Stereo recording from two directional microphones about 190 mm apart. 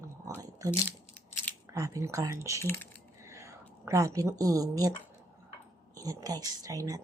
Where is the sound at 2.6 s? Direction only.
10° left (ahead or behind).